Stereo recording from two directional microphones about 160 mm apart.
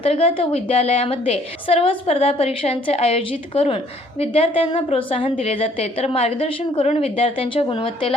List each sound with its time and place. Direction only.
0.0 s a woman's voice: 40° left (ahead or behind)